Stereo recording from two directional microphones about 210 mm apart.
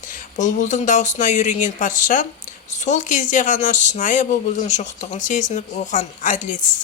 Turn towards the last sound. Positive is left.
turn(degrees=35)  # may be behind; listen again after turning